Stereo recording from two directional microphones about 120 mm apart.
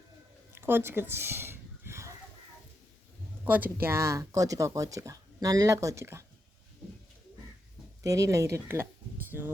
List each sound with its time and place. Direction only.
0.5 s a sound: 20° right (ahead or behind)
3.4 s speech: 15° right (ahead or behind)
8.0 s speech: 30° right (ahead or behind)